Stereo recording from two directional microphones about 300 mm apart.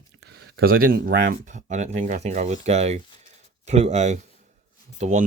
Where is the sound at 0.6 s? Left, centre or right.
Right.